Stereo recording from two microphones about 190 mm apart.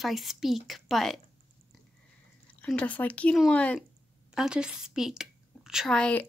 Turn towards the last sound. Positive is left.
turn(degrees=5)  # may be behind; listen again after turning